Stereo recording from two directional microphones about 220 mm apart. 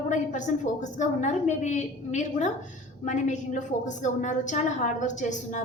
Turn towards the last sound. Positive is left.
turn(degrees=35)  # may be behind; listen again after turning